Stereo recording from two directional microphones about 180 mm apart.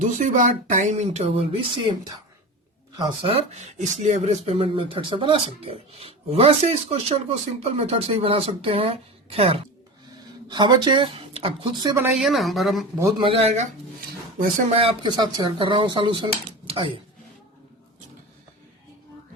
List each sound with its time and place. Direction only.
0.0 s speech: 45° right (ahead or behind); by 11.9 s 25° right (ahead or behind)
11.9 s speech: 10° right (ahead or behind)
12.2 s speech: centre (ahead or behind)
13.0 s speech: 20° right (ahead or behind)
13.2 s speech: 35° right (ahead or behind)
14.8 s speech: 25° right (ahead or behind)